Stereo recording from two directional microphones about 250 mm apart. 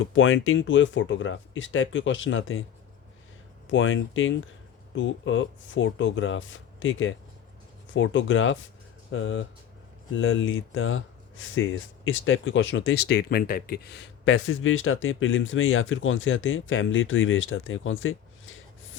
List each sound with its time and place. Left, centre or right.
0.0 s speech: left
3.7 s speech: left
14.3 s speech: left